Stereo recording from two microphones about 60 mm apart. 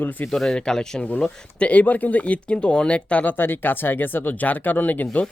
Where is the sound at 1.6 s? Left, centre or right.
Left.